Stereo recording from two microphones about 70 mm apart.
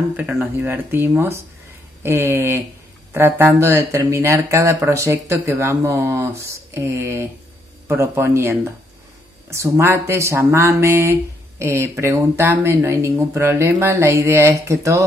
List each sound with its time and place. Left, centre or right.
0.6 s speech: right